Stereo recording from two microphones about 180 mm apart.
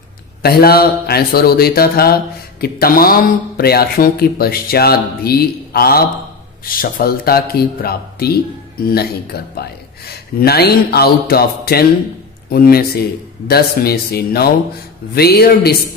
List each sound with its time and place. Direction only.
0.4 s speech: 60° left (ahead or behind)